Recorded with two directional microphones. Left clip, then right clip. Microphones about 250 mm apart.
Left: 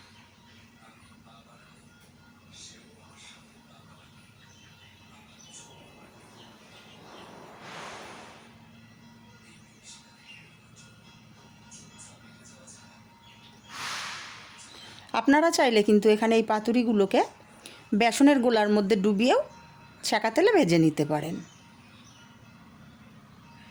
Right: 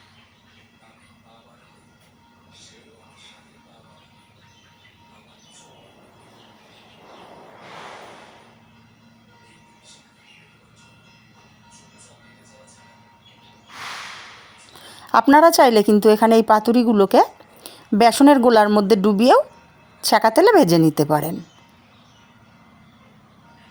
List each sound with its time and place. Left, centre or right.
14.9 s a woman's voice: right